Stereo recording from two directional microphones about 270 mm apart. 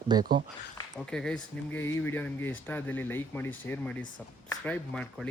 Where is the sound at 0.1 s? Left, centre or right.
Centre.